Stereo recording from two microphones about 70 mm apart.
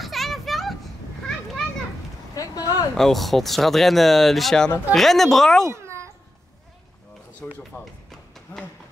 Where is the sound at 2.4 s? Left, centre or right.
Left.